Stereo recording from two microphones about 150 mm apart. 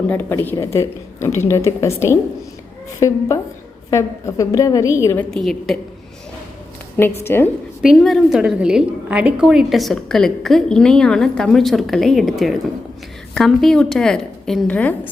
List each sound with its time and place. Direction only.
0.1 s a woman's voice: 15° left (ahead or behind)
5.3 s a woman's voice: centre (ahead or behind)
7.2 s a woman's voice: 15° left (ahead or behind)
7.8 s a woman's voice: centre (ahead or behind)